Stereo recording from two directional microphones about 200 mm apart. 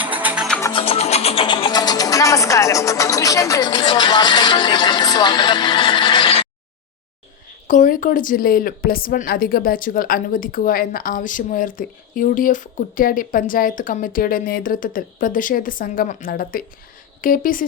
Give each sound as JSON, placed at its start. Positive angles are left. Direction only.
{"t": 0.0, "sound": "music", "side_deg": -10}
{"t": 0.4, "sound": "music", "side_deg": 5}
{"t": 0.7, "sound": "music", "side_deg": 30}
{"t": 7.7, "sound": "speech", "side_deg": 40}